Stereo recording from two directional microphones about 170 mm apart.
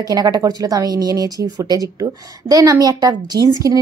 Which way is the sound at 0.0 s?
25° right (ahead or behind).